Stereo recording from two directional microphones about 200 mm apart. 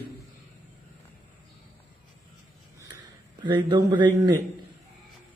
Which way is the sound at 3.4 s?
25° right (ahead or behind).